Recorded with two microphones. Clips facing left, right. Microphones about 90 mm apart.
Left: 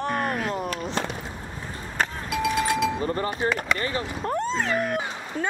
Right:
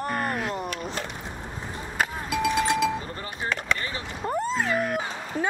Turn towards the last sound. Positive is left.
turn(degrees=0)  # may be behind; listen again after turning